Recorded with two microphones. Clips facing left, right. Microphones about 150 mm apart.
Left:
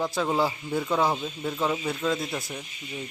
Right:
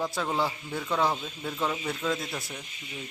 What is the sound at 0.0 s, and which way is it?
Speech, centre (ahead or behind).